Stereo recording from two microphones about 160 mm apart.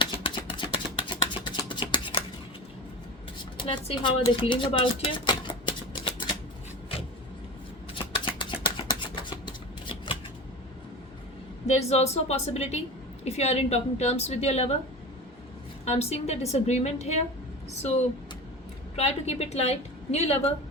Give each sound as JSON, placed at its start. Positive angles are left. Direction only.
{"t": 0.0, "sound": "a sound", "side_deg": 30}
{"t": 3.6, "sound": "speech", "side_deg": 30}
{"t": 7.9, "sound": "a sound", "side_deg": 30}
{"t": 9.5, "sound": "shuffling cards", "side_deg": 30}
{"t": 11.6, "sound": "a woman's voice", "side_deg": 45}
{"t": 15.8, "sound": "a woman's voice", "side_deg": 40}
{"t": 18.9, "sound": "a woman's voice", "side_deg": 40}